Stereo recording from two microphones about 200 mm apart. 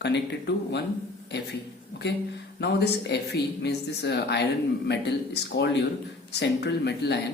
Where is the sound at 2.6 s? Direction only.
55° left (ahead or behind).